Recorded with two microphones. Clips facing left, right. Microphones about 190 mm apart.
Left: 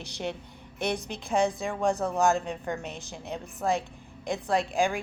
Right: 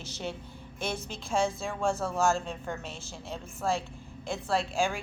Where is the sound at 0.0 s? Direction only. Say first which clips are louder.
Left 3 dB; 15° left (ahead or behind).